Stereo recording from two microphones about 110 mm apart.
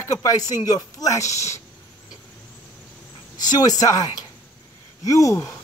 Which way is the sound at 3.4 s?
35° left (ahead or behind).